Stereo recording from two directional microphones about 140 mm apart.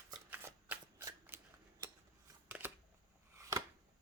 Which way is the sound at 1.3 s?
15° right (ahead or behind).